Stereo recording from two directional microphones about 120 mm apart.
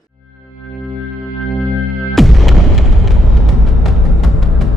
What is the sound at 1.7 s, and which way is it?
Music, centre (ahead or behind).